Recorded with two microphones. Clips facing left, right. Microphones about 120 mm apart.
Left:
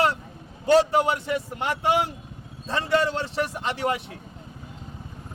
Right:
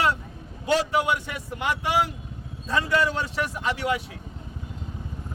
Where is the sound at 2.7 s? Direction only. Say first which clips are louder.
Left 1 dB; 30° left (ahead or behind).